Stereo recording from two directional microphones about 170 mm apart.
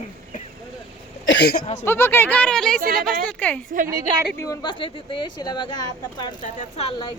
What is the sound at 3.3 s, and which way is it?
Speech, 10° left (ahead or behind).